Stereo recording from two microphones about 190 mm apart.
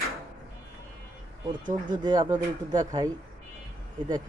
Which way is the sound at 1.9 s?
25° right (ahead or behind).